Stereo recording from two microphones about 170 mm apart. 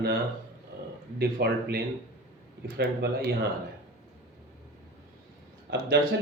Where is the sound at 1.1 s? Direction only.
70° right (ahead or behind).